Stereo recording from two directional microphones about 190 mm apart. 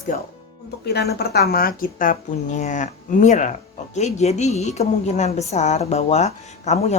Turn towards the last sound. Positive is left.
turn(degrees=35)  # may be behind; listen again after turning